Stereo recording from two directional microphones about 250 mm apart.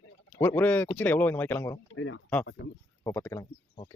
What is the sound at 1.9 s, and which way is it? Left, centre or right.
Speech, left.